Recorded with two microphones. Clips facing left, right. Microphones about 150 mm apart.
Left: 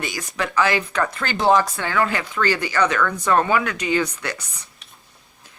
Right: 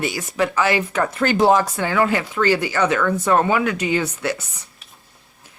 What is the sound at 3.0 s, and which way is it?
Speech, 20° right (ahead or behind).